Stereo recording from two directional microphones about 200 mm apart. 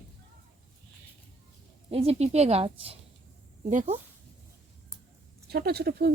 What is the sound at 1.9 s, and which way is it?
Speech, 30° right (ahead or behind).